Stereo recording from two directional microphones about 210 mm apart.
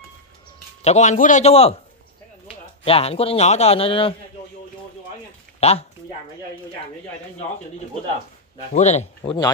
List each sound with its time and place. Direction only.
0.8 s a man's voice: 35° left (ahead or behind)
2.8 s a man's voice: 30° left (ahead or behind)
5.6 s speech: 30° left (ahead or behind)
8.7 s a man's voice: 30° left (ahead or behind)